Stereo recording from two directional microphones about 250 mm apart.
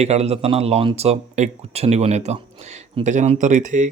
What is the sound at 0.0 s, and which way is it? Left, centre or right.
Speech, right.